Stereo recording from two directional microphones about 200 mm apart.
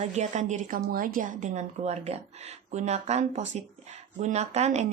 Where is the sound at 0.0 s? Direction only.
35° right (ahead or behind).